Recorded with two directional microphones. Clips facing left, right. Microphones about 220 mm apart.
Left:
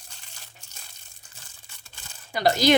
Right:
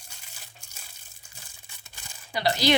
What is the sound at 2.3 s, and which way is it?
Speech, 45° left (ahead or behind).